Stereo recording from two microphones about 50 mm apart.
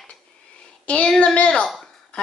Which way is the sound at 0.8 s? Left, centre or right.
Left.